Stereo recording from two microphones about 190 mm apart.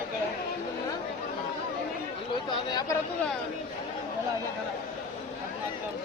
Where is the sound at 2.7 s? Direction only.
20° left (ahead or behind).